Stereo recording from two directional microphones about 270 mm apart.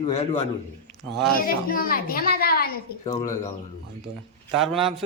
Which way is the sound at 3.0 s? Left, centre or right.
Centre.